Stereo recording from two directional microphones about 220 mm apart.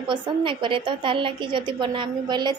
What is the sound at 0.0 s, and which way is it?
A woman's voice, 20° right (ahead or behind).